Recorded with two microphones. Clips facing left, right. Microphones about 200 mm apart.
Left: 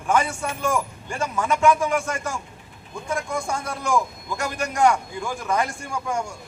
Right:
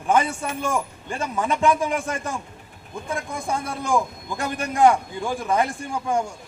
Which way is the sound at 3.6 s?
30° right (ahead or behind).